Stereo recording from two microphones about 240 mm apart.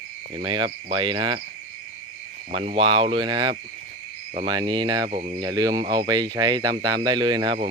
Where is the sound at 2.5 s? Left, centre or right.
Right.